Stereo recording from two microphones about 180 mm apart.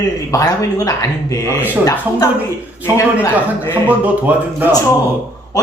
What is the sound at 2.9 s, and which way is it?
Speech, 15° left (ahead or behind).